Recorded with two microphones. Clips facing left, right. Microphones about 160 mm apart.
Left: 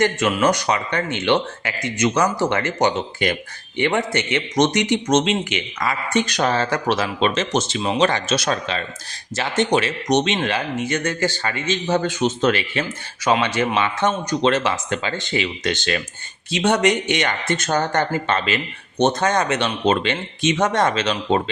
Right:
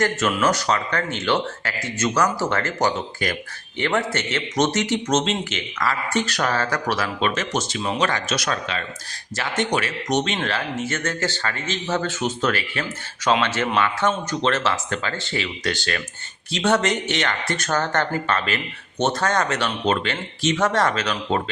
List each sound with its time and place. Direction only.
0.0 s speech: 10° left (ahead or behind)
13.2 s speech: 10° left (ahead or behind)